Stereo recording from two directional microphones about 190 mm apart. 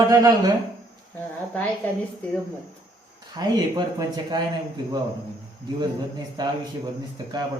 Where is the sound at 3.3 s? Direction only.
20° right (ahead or behind).